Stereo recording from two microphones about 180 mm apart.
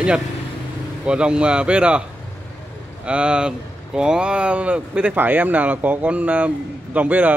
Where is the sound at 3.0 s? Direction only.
5° right (ahead or behind).